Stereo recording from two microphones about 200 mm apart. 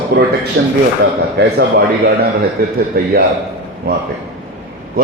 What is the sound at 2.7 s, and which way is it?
Speech, 50° right (ahead or behind).